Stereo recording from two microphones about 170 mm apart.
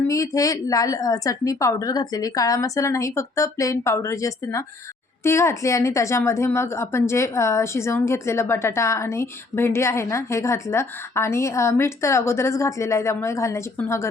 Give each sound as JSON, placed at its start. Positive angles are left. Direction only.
{"t": 0.1, "sound": "a woman's voice", "side_deg": 20}